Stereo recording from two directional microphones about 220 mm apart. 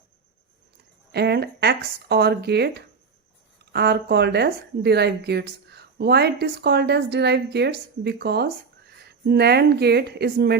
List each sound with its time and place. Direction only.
1.1 s speech: 50° right (ahead or behind)